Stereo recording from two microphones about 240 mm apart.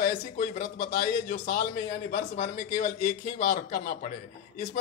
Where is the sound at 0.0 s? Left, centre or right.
Left.